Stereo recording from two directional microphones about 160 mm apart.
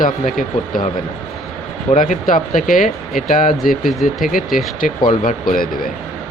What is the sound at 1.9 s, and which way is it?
Speech, 55° left (ahead or behind).